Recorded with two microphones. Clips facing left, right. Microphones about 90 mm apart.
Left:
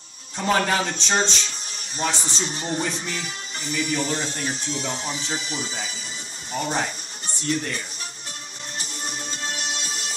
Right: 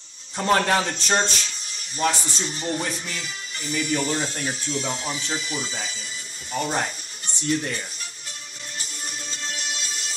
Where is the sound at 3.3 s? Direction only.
55° left (ahead or behind).